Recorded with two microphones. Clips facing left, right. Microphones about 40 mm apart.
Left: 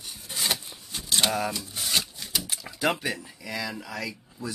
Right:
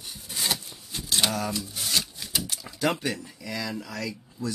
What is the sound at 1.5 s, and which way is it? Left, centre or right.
Shuffling cards, centre.